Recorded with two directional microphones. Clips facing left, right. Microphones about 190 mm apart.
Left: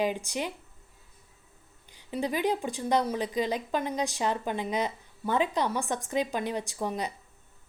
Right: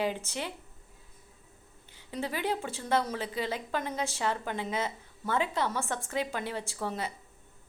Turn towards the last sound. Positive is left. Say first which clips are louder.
# left 3 dB
turn(degrees=15)  # may be behind; listen again after turning